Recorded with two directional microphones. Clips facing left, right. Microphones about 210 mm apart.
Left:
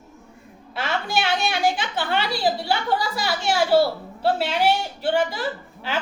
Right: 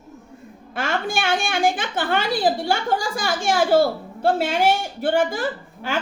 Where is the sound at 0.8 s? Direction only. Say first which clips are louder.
Right 1 dB; 50° right (ahead or behind).